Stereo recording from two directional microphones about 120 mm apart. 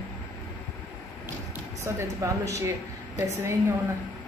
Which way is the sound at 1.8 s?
25° right (ahead or behind).